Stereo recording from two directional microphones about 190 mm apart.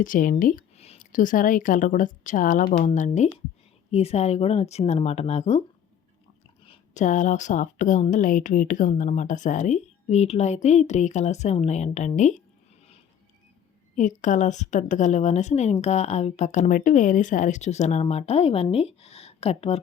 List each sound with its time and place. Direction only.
0.0 s a woman's voice: 45° left (ahead or behind)
6.7 s a woman's voice: 40° left (ahead or behind)
14.2 s a woman's voice: 40° left (ahead or behind)